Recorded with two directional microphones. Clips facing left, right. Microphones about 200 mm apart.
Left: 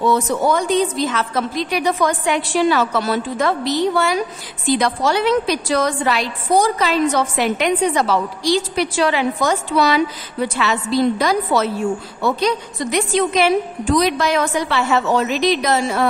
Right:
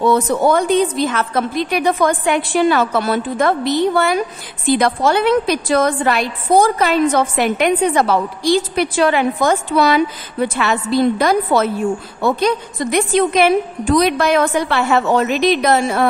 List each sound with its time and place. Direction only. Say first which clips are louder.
0.0 s a woman's voice: right 3 dB; 55° right (ahead or behind)